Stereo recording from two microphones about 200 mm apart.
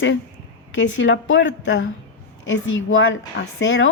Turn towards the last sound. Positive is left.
turn(degrees=70)  # may be behind; listen again after turning